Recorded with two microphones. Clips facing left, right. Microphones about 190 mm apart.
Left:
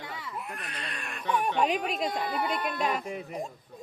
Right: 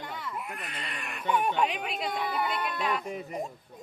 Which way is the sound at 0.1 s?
5° left (ahead or behind).